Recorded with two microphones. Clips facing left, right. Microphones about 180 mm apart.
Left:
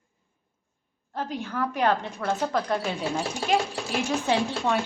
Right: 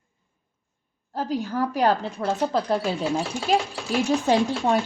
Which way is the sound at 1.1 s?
35° right (ahead or behind).